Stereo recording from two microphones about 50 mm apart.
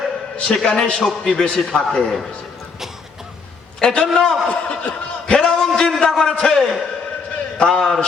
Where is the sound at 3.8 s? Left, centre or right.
Centre.